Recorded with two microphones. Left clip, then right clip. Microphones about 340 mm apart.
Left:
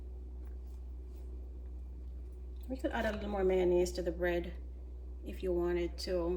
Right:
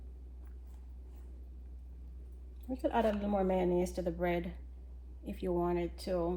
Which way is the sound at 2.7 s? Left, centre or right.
Centre.